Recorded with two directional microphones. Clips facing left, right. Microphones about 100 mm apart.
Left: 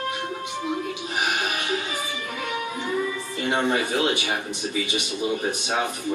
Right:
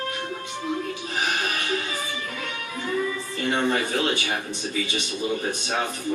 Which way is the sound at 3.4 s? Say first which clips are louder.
Left 1 dB; 15° left (ahead or behind).